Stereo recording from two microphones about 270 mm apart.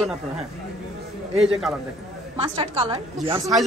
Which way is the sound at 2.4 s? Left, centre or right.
Centre.